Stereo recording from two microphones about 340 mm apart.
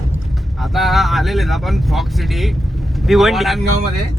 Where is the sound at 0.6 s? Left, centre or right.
Centre.